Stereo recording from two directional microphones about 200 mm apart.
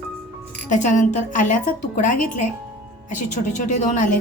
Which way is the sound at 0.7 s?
40° left (ahead or behind).